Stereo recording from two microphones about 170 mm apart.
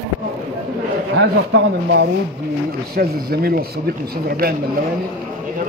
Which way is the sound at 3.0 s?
65° right (ahead or behind).